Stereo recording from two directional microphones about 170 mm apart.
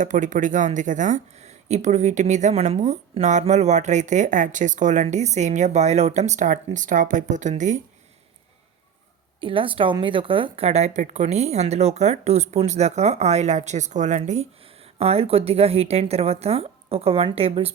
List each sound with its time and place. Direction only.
0.0 s speech: 50° right (ahead or behind)
9.4 s a woman's voice: 30° right (ahead or behind)